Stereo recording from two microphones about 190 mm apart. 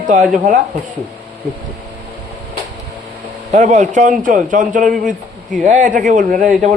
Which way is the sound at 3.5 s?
40° right (ahead or behind).